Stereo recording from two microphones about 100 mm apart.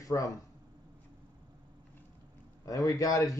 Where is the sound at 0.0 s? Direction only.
35° left (ahead or behind).